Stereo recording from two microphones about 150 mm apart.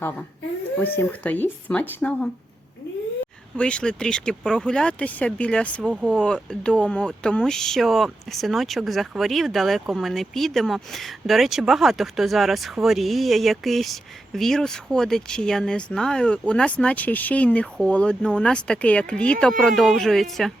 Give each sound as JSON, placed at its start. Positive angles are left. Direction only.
{"t": 0.0, "sound": "speech", "side_deg": 10}
{"t": 3.6, "sound": "speech", "side_deg": 5}
{"t": 5.8, "sound": "speech", "side_deg": -5}
{"t": 6.1, "sound": "speech", "side_deg": 5}